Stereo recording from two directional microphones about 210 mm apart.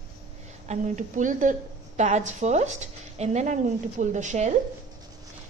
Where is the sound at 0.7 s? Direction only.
35° right (ahead or behind).